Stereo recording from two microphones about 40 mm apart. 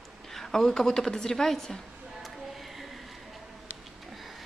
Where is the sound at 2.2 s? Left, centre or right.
Centre.